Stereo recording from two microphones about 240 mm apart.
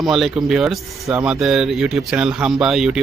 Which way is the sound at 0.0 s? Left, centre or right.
Centre.